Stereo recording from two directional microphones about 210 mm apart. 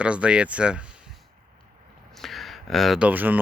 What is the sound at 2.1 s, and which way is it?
Speech, centre (ahead or behind).